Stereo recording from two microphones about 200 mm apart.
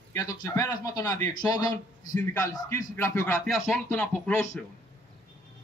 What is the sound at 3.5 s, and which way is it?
Music, centre (ahead or behind).